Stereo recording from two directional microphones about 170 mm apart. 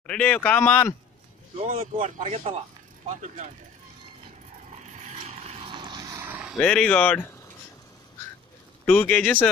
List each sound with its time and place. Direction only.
0.0 s speech: 5° left (ahead or behind)
1.6 s speech: 40° right (ahead or behind)
4.7 s vehicle: 45° right (ahead or behind); by 6.2 s 25° right (ahead or behind)
6.2 s a sound: 10° right (ahead or behind)
6.6 s speech: 5° left (ahead or behind)
8.8 s speech: 10° left (ahead or behind)